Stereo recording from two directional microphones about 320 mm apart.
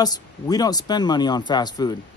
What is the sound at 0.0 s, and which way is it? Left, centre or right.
Speech, centre.